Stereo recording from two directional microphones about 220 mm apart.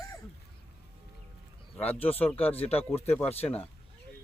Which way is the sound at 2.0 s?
10° left (ahead or behind).